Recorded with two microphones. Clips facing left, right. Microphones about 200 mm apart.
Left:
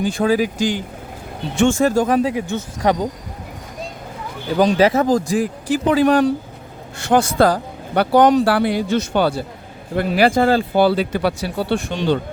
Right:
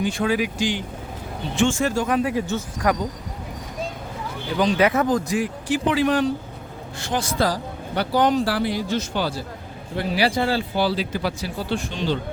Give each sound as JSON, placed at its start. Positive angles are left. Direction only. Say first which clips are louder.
{"t": 0.0, "sound": "speech", "louder": "left 5 dB", "side_deg": 35}
{"t": 2.2, "sound": "speech", "louder": "left 2 dB", "side_deg": 15}
{"t": 2.8, "sound": "speech", "louder": "left 5 dB", "side_deg": 30}
{"t": 4.5, "sound": "speech", "louder": "left 5 dB", "side_deg": 35}
{"t": 7.1, "sound": "speech", "louder": "left 8 dB", "side_deg": 60}